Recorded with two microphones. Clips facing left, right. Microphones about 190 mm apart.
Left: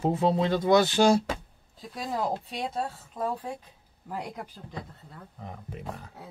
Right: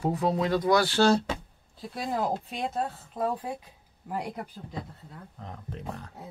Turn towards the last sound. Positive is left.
turn(degrees=5)  # may be behind; listen again after turning